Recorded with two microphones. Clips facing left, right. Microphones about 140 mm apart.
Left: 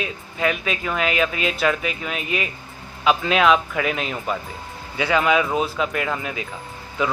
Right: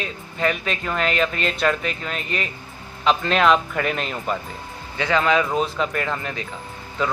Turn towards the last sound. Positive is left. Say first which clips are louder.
# left 1 dB
turn(degrees=5)  # may be behind; listen again after turning